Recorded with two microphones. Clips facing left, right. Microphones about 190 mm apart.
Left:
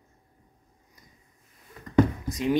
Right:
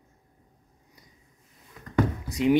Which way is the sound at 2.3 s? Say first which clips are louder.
Right 4 dB; 15° right (ahead or behind).